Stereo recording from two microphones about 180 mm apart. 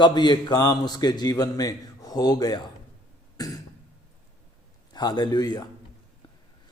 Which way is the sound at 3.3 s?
20° left (ahead or behind).